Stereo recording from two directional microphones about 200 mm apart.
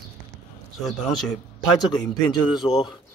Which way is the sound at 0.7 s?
Centre (ahead or behind).